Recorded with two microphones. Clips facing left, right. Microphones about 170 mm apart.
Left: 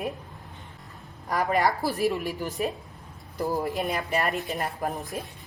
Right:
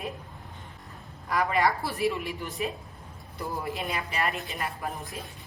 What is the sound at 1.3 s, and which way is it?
A man's voice, 45° left (ahead or behind).